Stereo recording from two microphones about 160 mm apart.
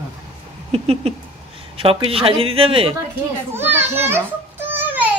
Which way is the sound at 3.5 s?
15° right (ahead or behind).